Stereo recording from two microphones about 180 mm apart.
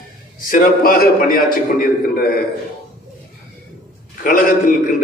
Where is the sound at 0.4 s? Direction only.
50° left (ahead or behind).